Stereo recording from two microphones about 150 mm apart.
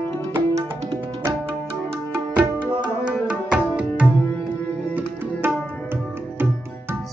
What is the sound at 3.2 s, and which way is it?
Music, 5° right (ahead or behind).